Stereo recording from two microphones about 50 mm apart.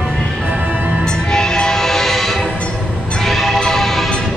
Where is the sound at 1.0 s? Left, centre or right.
Centre.